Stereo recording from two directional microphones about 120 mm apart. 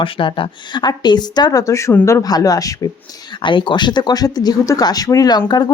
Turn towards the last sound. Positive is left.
turn(degrees=35)  # may be behind; listen again after turning